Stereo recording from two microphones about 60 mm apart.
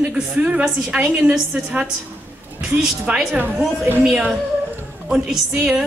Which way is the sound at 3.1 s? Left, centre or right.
Right.